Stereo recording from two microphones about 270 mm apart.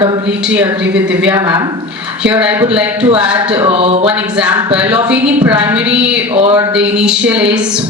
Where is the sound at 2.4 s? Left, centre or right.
Centre.